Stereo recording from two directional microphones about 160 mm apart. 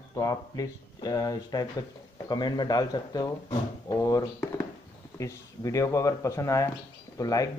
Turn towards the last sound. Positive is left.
turn(degrees=20)  # may be behind; listen again after turning